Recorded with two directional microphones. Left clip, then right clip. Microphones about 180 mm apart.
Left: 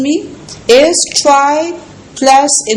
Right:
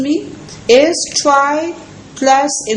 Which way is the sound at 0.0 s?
30° left (ahead or behind).